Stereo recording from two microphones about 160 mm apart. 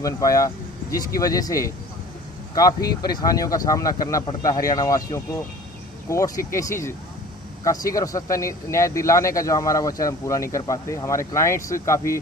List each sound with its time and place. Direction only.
0.0 s speech: 20° left (ahead or behind)